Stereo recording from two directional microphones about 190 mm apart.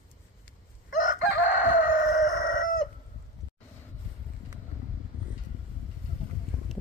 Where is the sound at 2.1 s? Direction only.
40° left (ahead or behind).